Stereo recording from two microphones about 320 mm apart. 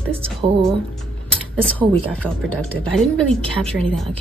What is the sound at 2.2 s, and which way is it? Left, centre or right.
Speech, centre.